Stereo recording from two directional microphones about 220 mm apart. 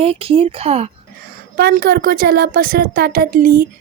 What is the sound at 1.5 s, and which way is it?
A woman's voice, 45° right (ahead or behind).